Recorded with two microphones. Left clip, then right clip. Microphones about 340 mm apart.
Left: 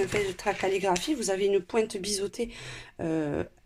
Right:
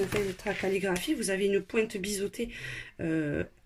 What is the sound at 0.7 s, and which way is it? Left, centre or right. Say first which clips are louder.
Speech: left 3 dB; centre.